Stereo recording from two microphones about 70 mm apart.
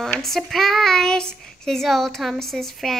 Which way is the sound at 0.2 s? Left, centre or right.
Centre.